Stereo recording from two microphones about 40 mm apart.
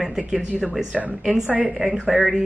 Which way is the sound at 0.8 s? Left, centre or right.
Right.